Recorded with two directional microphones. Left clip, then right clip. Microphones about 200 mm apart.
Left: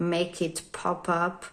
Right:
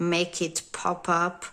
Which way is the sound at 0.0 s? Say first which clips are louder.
Right 1 dB; 20° right (ahead or behind).